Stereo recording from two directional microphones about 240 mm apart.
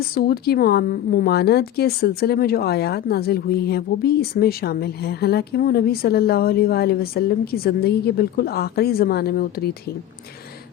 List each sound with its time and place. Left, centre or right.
0.0 s a woman's voice: left